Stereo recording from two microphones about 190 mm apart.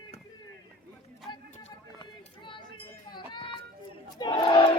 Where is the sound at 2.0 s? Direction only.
25° left (ahead or behind).